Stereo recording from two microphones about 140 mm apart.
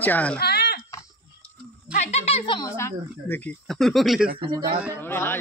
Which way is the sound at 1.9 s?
55° left (ahead or behind).